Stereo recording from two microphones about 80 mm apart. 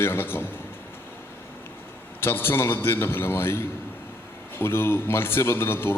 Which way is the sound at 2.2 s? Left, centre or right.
Left.